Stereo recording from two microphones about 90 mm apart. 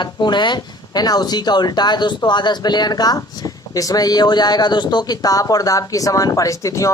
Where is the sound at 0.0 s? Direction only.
55° left (ahead or behind).